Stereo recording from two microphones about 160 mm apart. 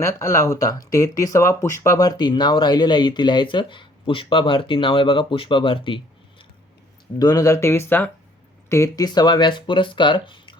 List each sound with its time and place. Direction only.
0.0 s speech: 20° left (ahead or behind)
7.2 s speech: 25° left (ahead or behind)